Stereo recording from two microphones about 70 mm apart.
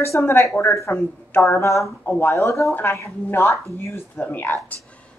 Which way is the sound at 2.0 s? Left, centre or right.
Left.